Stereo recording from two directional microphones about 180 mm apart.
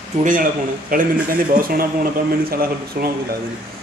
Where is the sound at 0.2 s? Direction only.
50° right (ahead or behind).